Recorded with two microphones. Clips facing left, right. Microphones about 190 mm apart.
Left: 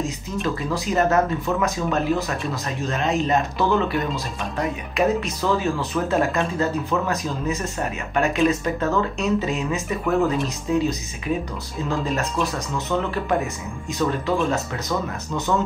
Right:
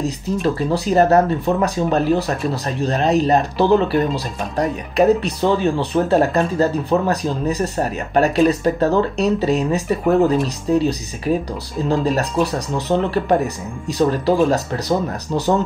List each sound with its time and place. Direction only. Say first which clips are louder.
0.6 s speech: right 6 dB; 35° right (ahead or behind)